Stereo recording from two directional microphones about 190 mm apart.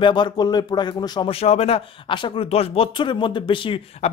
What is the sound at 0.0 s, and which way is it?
Speech, 25° left (ahead or behind).